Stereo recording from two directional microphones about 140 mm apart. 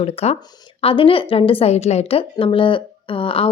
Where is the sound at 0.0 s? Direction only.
45° left (ahead or behind).